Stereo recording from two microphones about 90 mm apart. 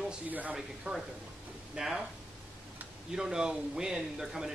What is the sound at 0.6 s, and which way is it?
Speech, 5° right (ahead or behind).